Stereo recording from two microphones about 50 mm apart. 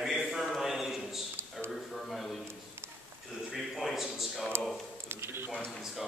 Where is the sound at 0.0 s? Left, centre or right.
Centre.